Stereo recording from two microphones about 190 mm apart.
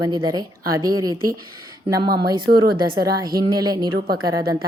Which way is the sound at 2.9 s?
20° right (ahead or behind).